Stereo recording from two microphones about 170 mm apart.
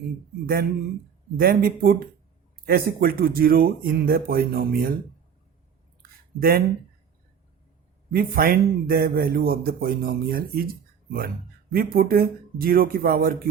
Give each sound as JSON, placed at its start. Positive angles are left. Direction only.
{"t": 0.4, "sound": "speech", "side_deg": -60}
{"t": 6.0, "sound": "a sound", "side_deg": -60}
{"t": 8.1, "sound": "speech", "side_deg": -60}
{"t": 11.7, "sound": "speech", "side_deg": -60}